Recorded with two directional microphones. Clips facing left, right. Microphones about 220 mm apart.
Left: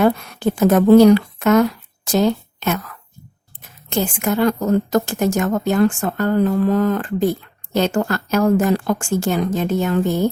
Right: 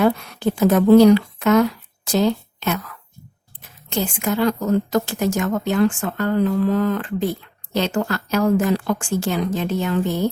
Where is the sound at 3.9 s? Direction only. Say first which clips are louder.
Left 2 dB; 50° left (ahead or behind).